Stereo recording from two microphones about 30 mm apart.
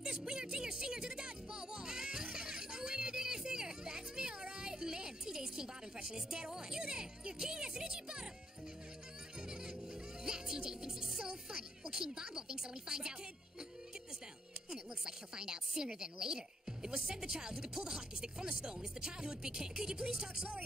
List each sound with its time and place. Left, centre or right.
0.2 s music: right
9.5 s music: right
11.1 s speech: right
14.7 s a woman's voice: right